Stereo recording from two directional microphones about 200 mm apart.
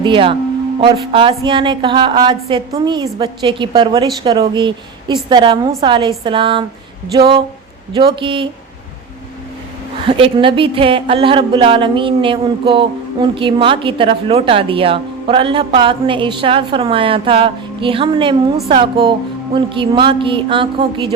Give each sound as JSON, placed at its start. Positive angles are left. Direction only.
{"t": 0.0, "sound": "a woman's voice", "side_deg": -25}
{"t": 10.1, "sound": "a woman's voice", "side_deg": -25}